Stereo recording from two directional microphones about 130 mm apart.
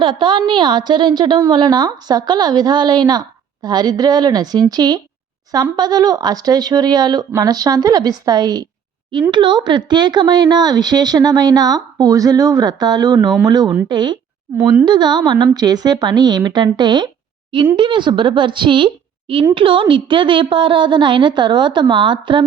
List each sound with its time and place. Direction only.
0.0 s a woman's voice: 40° right (ahead or behind)